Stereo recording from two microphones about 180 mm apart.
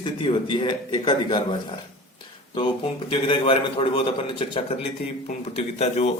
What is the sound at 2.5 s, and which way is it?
A man's voice, 30° left (ahead or behind).